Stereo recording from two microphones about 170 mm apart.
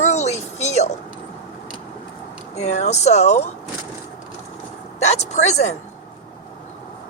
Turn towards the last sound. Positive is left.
turn(degrees=40)  # may be behind; listen again after turning